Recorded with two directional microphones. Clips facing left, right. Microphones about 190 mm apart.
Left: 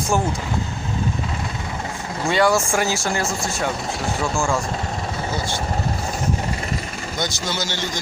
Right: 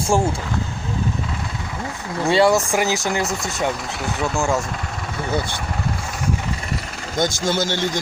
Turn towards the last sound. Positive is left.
turn(degrees=-50)  # may be behind; listen again after turning